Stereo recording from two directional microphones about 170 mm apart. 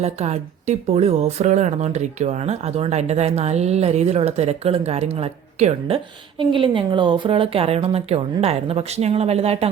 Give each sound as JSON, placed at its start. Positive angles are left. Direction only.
{"t": 0.0, "sound": "speech", "side_deg": -40}